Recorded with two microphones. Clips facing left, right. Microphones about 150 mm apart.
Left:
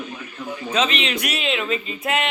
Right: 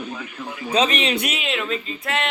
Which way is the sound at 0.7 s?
35° right (ahead or behind).